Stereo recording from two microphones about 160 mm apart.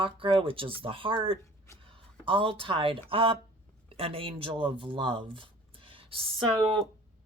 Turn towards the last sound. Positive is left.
turn(degrees=-30)  # may be behind; listen again after turning